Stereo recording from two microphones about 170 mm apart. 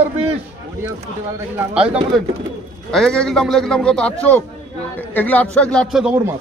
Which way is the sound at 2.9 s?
5° left (ahead or behind).